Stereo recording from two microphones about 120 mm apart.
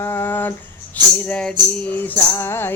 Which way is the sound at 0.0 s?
20° left (ahead or behind).